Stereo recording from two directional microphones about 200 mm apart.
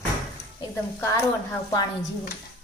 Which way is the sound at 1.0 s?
10° left (ahead or behind).